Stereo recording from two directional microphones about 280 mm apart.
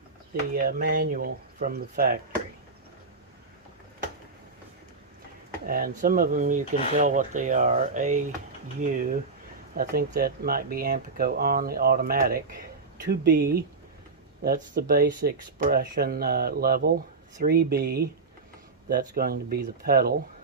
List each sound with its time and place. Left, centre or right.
0.5 s speech: right
5.6 s speech: right